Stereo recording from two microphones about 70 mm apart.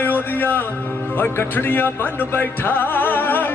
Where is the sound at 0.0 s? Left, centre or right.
Left.